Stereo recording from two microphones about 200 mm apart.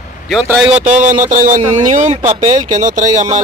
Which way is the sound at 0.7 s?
40° right (ahead or behind).